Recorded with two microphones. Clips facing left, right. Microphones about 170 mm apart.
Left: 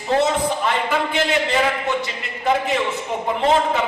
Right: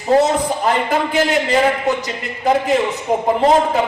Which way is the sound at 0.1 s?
40° right (ahead or behind).